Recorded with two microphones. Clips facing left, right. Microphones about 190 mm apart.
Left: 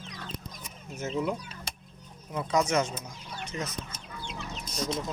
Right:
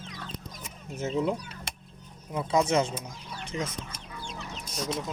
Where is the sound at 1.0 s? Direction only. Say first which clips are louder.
Right 2 dB; 25° right (ahead or behind).